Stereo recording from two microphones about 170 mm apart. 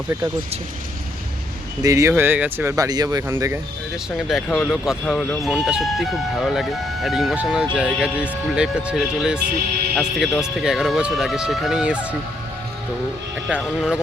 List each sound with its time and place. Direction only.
1.8 s speech: 20° right (ahead or behind)
3.9 s speech: centre (ahead or behind)
13.6 s speech: centre (ahead or behind)